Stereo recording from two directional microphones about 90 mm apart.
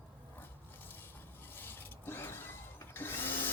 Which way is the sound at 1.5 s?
25° left (ahead or behind).